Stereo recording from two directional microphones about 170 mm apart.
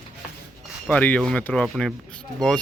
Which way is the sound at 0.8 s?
10° left (ahead or behind).